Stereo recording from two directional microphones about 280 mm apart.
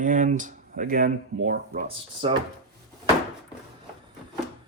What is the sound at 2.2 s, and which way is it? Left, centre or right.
Speech, centre.